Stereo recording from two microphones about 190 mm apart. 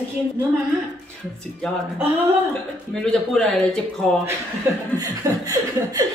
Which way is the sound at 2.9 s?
5° left (ahead or behind).